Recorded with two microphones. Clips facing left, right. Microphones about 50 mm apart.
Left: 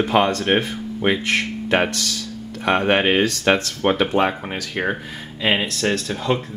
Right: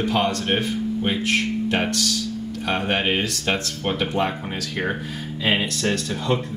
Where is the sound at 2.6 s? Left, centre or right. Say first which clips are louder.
Left 6 dB; left.